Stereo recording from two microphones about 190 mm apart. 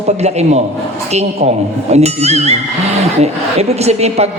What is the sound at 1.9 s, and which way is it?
A woman's voice, 35° right (ahead or behind).